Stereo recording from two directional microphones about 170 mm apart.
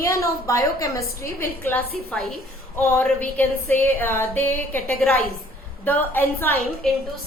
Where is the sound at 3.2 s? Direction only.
10° left (ahead or behind).